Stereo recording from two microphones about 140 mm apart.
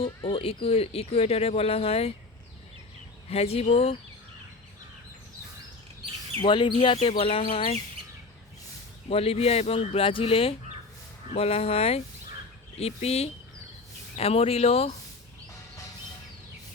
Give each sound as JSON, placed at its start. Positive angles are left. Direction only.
{"t": 0.0, "sound": "speech", "side_deg": 35}
{"t": 3.2, "sound": "speech", "side_deg": 50}
{"t": 6.4, "sound": "speech", "side_deg": 35}
{"t": 9.0, "sound": "speech", "side_deg": 45}